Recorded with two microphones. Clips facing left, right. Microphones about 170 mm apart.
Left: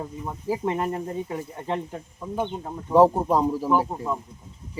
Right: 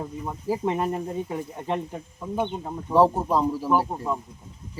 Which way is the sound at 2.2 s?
Centre (ahead or behind).